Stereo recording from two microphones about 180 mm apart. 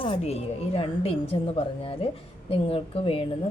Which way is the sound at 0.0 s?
30° left (ahead or behind).